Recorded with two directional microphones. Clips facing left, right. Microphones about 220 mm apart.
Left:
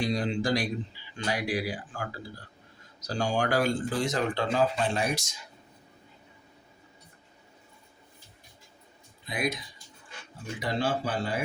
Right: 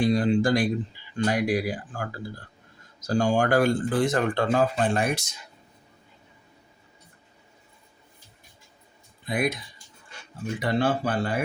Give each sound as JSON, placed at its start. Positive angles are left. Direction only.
{"t": 0.0, "sound": "speech", "side_deg": -50}
{"t": 9.2, "sound": "speech", "side_deg": -55}
{"t": 10.6, "sound": "speech", "side_deg": -55}